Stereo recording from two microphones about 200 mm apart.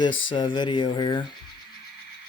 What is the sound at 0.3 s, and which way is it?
Speech, 25° left (ahead or behind).